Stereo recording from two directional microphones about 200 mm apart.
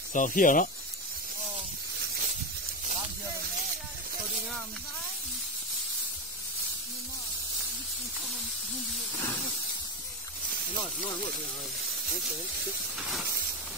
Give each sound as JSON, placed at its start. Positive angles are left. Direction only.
{"t": 0.1, "sound": "speech", "side_deg": 40}